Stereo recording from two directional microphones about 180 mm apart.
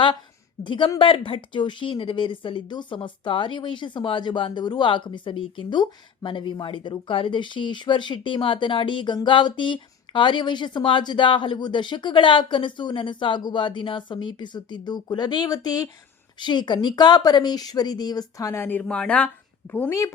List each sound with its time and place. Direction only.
0.6 s speech: 25° left (ahead or behind)